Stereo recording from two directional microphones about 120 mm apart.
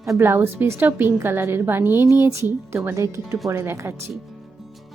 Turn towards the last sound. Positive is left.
turn(degrees=-20)  # may be behind; listen again after turning